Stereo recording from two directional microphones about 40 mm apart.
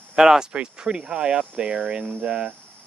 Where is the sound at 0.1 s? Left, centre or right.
Centre.